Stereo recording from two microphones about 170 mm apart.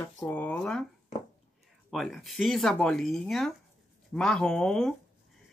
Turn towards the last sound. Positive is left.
turn(degrees=5)  # may be behind; listen again after turning